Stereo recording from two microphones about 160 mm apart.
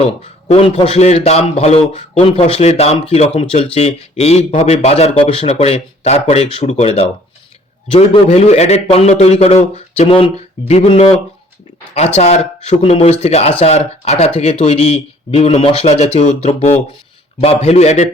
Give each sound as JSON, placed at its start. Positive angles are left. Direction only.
{"t": 0.0, "sound": "a man's voice", "side_deg": 40}